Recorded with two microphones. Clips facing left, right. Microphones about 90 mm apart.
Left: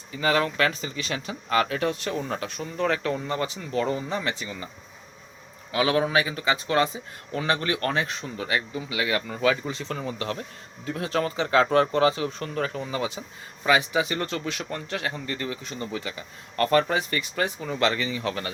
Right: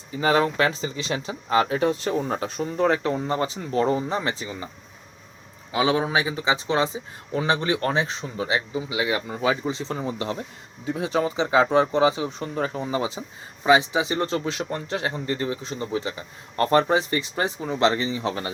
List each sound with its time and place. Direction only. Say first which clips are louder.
0.1 s speech: right 3 dB; 30° right (ahead or behind)
5.7 s speech: right 1 dB; 25° right (ahead or behind)